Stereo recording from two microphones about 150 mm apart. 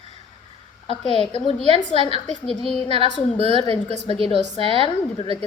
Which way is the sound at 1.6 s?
45° right (ahead or behind).